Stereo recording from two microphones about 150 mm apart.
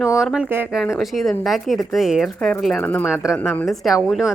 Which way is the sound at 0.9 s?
Centre (ahead or behind).